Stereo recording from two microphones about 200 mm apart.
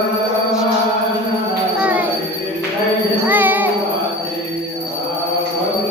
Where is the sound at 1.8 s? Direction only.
5° right (ahead or behind).